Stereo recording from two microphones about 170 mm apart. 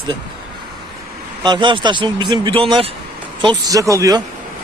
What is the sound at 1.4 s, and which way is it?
Speech, 25° right (ahead or behind).